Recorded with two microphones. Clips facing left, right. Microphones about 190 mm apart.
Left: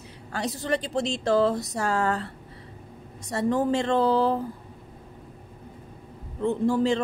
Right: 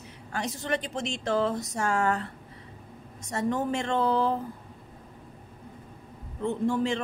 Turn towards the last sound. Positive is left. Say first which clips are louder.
# left 4 dB
turn(degrees=35)  # may be behind; listen again after turning